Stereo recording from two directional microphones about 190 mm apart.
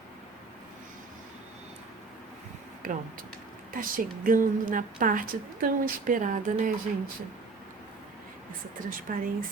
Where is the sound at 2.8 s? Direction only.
45° right (ahead or behind).